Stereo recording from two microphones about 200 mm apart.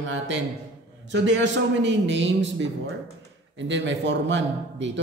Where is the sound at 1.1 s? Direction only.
65° right (ahead or behind).